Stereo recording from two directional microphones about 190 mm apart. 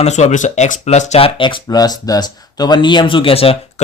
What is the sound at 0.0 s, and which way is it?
Speech, 35° left (ahead or behind).